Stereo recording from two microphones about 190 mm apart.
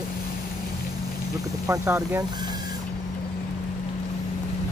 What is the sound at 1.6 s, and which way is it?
Speech, 15° right (ahead or behind).